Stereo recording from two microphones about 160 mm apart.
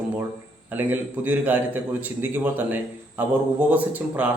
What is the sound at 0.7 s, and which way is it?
A man's voice, 10° right (ahead or behind).